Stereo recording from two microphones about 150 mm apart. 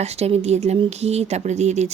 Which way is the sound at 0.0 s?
45° right (ahead or behind).